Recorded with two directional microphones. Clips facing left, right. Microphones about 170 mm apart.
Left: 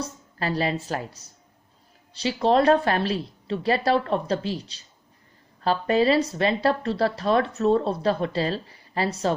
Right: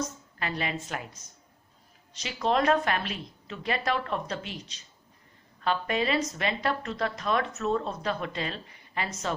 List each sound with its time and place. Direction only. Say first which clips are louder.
0.0 s a woman's voice: left 4 dB; 35° left (ahead or behind)